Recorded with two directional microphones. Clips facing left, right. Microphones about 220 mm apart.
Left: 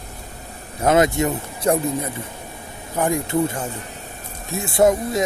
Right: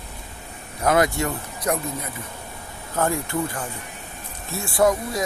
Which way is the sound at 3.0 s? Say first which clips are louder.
Left 4 dB; 15° left (ahead or behind).